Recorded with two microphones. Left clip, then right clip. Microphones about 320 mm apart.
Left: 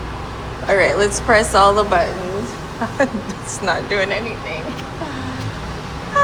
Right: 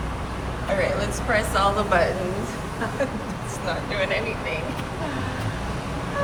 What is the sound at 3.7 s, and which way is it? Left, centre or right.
Speech, centre.